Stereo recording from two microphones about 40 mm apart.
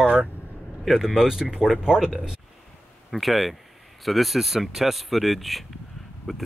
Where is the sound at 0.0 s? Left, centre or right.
Right.